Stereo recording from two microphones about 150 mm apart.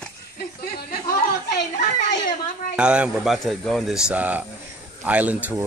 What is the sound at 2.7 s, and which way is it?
A man's voice, 5° right (ahead or behind).